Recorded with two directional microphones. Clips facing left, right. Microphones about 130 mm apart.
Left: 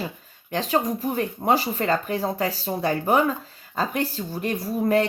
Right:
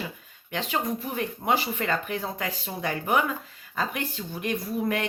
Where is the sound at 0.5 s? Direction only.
40° left (ahead or behind).